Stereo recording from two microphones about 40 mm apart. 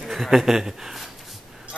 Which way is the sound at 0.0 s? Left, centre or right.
Centre.